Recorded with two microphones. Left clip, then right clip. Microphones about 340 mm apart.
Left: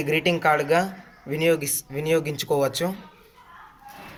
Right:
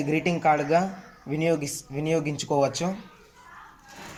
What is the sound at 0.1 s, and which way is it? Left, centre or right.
Speech, left.